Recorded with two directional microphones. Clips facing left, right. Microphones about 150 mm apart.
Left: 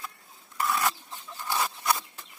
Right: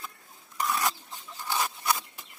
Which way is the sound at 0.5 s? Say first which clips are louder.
Left 1 dB; 15° right (ahead or behind).